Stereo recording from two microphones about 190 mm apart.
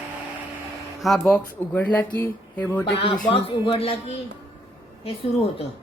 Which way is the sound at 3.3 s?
30° left (ahead or behind).